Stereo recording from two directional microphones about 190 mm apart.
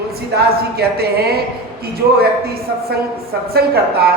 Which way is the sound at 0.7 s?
55° right (ahead or behind).